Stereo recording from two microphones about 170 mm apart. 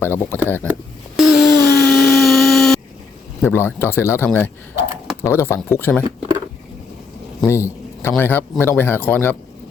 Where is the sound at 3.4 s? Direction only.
15° left (ahead or behind).